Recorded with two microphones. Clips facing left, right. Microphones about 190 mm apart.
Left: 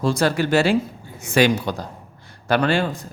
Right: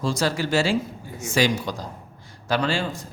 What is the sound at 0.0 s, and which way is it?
A man's voice, 60° left (ahead or behind).